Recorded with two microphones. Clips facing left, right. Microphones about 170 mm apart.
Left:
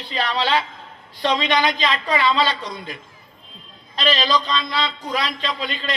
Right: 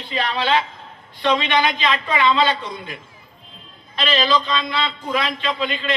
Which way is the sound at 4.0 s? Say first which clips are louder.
Right 1 dB; 35° left (ahead or behind).